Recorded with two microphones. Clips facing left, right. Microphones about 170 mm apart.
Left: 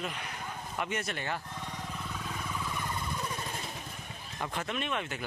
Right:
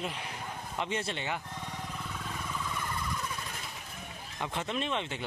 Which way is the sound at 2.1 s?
Centre (ahead or behind).